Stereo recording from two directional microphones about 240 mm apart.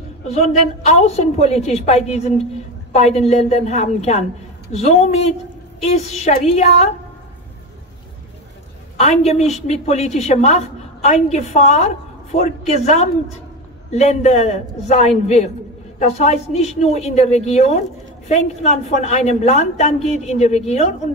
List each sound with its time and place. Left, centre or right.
0.2 s a woman's voice: left
8.9 s a woman's voice: left